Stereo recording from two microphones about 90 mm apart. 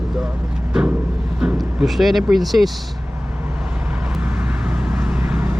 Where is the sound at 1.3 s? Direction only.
10° right (ahead or behind).